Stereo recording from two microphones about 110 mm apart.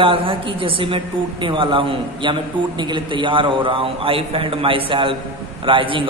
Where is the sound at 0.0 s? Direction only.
50° right (ahead or behind).